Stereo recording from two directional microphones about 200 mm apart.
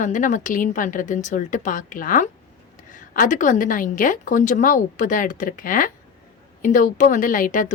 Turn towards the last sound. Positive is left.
turn(degrees=45)  # may be behind; listen again after turning